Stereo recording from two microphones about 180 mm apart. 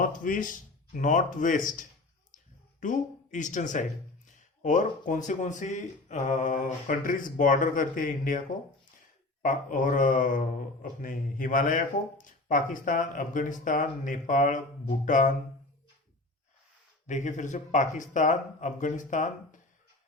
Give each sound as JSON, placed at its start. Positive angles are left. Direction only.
{"t": 0.0, "sound": "speech", "side_deg": 50}
{"t": 2.8, "sound": "speech", "side_deg": 45}
{"t": 9.4, "sound": "speech", "side_deg": 45}
{"t": 17.1, "sound": "speech", "side_deg": 40}